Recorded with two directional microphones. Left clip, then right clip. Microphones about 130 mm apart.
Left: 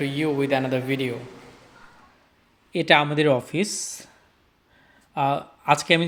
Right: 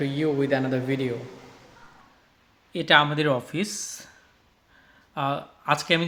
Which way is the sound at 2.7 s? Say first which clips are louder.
Left 1 dB; 35° left (ahead or behind).